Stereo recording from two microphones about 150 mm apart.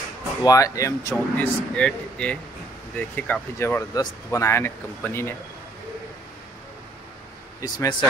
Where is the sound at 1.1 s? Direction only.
5° left (ahead or behind).